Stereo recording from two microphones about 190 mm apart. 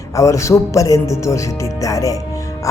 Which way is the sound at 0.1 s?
15° left (ahead or behind).